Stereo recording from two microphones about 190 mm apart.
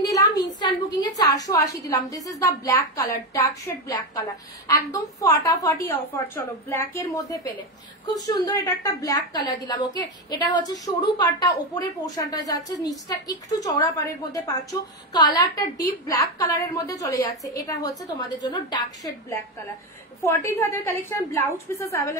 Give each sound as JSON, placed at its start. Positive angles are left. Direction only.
{"t": 0.0, "sound": "a sound", "side_deg": 20}
{"t": 0.6, "sound": "a woman's voice", "side_deg": 20}
{"t": 20.2, "sound": "a woman's voice", "side_deg": 15}